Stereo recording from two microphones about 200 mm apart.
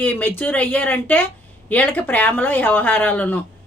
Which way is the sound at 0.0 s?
10° left (ahead or behind).